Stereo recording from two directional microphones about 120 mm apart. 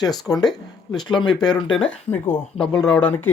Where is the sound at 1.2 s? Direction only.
40° left (ahead or behind).